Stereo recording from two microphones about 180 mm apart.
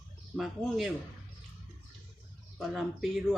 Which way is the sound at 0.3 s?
Centre (ahead or behind).